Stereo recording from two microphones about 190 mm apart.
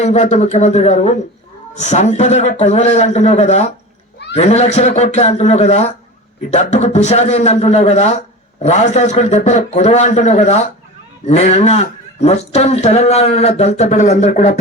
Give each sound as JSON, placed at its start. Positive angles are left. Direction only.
{"t": 0.0, "sound": "speech", "side_deg": 35}